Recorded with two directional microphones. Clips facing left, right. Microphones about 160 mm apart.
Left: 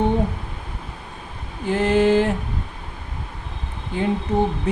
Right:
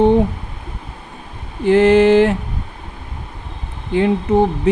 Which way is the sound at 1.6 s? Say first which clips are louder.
Right 7 dB; 90° right.